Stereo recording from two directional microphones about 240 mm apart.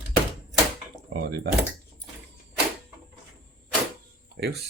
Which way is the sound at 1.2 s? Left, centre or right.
Right.